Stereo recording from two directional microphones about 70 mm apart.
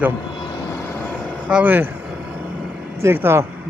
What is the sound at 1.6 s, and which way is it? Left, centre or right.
Vehicle, right.